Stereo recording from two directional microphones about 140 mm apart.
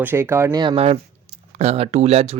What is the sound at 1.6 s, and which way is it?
Speech, 50° right (ahead or behind).